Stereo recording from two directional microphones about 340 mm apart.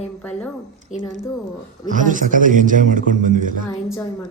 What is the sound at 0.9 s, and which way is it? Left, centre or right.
Speech, left.